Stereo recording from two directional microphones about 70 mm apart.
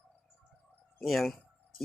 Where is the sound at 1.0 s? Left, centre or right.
Centre.